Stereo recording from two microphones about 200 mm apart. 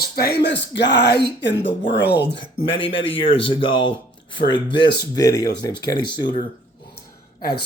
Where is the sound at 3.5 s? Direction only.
25° left (ahead or behind).